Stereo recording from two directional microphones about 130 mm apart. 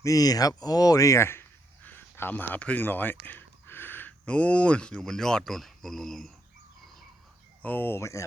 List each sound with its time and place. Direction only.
0.0 s speech: 25° left (ahead or behind); by 6.3 s centre (ahead or behind)
7.6 s speech: 15° left (ahead or behind)